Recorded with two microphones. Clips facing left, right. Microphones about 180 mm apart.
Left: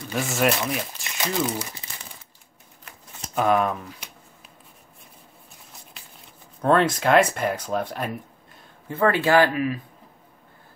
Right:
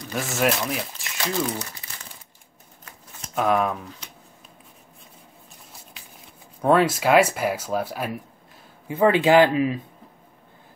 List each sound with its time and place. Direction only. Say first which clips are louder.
0.0 s speech: left 1 dB; centre (ahead or behind)
1.4 s speech: left 1 dB; 10° left (ahead or behind)
3.3 s speech: left 1 dB; centre (ahead or behind)
6.6 s speech: right 1 dB; 5° right (ahead or behind)
8.8 s speech: right 3 dB; 15° right (ahead or behind)